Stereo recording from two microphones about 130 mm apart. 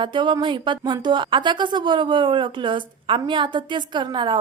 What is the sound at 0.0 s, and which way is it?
Speech, 40° right (ahead or behind).